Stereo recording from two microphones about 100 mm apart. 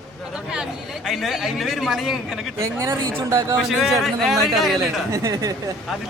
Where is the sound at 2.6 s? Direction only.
30° right (ahead or behind).